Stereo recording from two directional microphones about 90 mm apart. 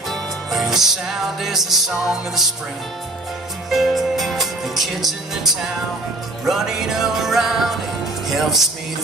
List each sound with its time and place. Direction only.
0.1 s music: centre (ahead or behind)
3.7 s music: centre (ahead or behind)